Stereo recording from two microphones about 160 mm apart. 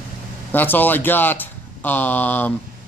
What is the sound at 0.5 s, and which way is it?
Speech, 10° left (ahead or behind).